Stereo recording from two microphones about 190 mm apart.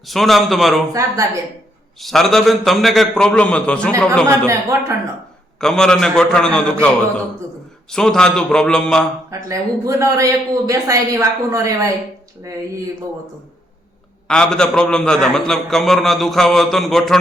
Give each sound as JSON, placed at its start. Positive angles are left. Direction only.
{"t": 0.0, "sound": "a man's voice", "side_deg": 0}
{"t": 2.0, "sound": "a man's voice", "side_deg": 0}
{"t": 4.3, "sound": "speech", "side_deg": -15}
{"t": 5.5, "sound": "a man's voice", "side_deg": 5}
{"t": 7.9, "sound": "a man's voice", "side_deg": 5}
{"t": 9.5, "sound": "speech", "side_deg": -15}
{"t": 14.3, "sound": "a man's voice", "side_deg": 5}